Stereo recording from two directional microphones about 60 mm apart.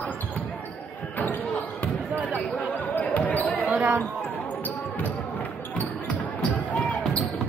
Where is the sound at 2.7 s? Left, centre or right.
Left.